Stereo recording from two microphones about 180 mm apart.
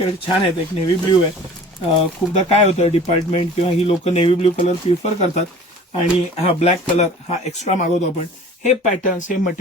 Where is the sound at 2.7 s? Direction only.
35° left (ahead or behind).